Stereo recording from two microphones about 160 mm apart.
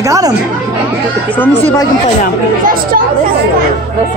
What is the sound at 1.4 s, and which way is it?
Speech, 15° left (ahead or behind).